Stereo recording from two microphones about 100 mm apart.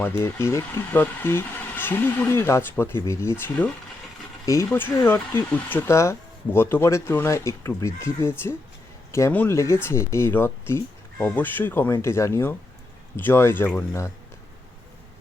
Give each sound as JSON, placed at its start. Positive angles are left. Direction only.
{"t": 0.0, "sound": "speech", "side_deg": 25}
{"t": 4.7, "sound": "speech", "side_deg": 20}